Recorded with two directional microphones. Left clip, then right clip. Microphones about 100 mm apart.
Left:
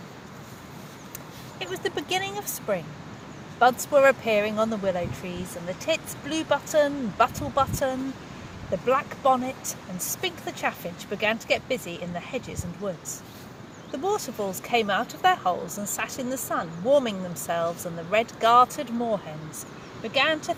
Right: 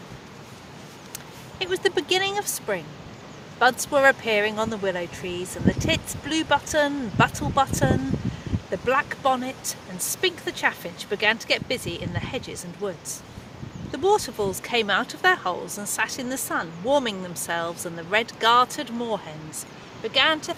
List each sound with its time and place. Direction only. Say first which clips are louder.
1.5 s speech: right 6 dB; 20° right (ahead or behind)
4.1 s speech: right 1 dB; 15° right (ahead or behind)
8.9 s speech: even; 20° right (ahead or behind)